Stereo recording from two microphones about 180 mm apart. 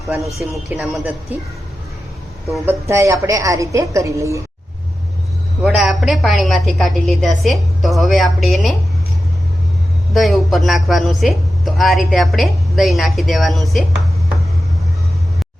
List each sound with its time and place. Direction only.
0.3 s speech: centre (ahead or behind)
2.6 s a woman's voice: 15° right (ahead or behind)
5.6 s speech: centre (ahead or behind)
10.2 s speech: centre (ahead or behind)